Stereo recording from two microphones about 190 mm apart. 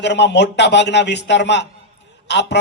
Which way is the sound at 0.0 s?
65° left (ahead or behind).